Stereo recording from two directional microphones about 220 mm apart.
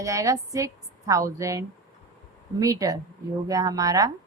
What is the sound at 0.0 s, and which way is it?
A woman's voice, 15° right (ahead or behind).